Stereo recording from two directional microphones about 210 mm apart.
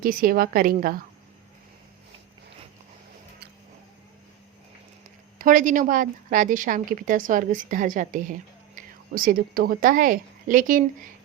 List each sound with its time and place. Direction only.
0.0 s a woman's voice: 45° right (ahead or behind)
5.4 s a woman's voice: 40° right (ahead or behind)